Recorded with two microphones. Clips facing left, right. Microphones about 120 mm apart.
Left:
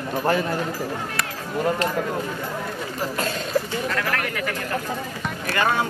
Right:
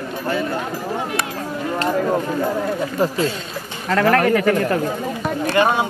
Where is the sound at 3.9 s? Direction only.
45° right (ahead or behind).